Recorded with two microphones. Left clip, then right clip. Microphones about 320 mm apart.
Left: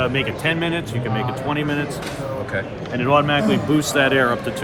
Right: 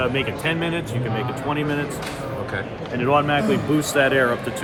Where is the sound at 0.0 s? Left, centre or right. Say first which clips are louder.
Left 2 dB; left.